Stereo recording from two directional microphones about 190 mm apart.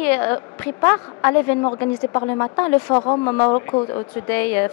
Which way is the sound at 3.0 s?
25° left (ahead or behind).